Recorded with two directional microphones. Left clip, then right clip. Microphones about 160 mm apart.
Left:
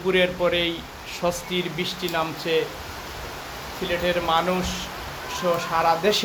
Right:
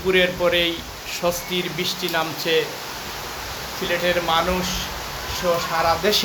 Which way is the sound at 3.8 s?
Centre (ahead or behind).